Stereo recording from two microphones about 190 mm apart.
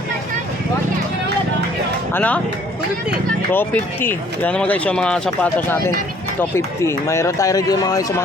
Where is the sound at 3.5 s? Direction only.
10° left (ahead or behind).